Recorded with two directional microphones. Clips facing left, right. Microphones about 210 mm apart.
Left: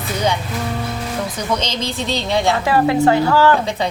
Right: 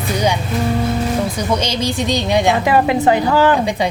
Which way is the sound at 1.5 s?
10° right (ahead or behind).